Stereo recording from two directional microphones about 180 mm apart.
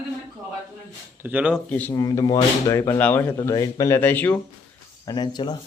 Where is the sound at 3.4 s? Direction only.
20° left (ahead or behind).